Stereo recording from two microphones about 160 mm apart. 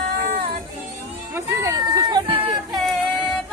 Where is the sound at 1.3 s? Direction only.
20° right (ahead or behind).